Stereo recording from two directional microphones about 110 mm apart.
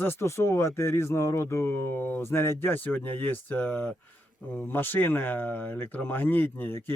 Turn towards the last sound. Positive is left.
turn(degrees=20)  # may be behind; listen again after turning